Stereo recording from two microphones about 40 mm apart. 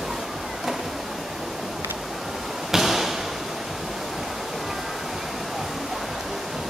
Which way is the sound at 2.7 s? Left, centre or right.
Centre.